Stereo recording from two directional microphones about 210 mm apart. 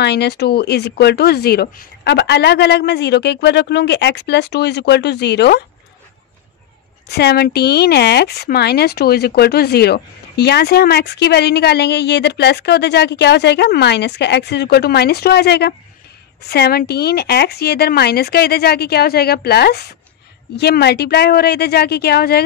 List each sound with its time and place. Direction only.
0.0 s speech: 50° left (ahead or behind)
7.1 s speech: 50° left (ahead or behind)